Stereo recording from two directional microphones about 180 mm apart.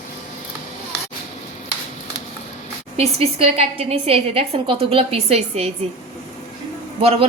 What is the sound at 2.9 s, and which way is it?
A woman's voice, 35° right (ahead or behind).